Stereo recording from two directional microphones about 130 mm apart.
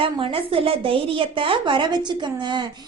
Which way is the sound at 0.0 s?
45° right (ahead or behind).